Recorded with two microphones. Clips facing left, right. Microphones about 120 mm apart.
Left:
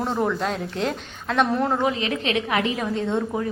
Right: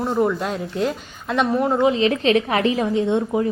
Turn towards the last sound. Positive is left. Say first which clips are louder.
# right 5 dB
turn(degrees=-15)  # may be behind; listen again after turning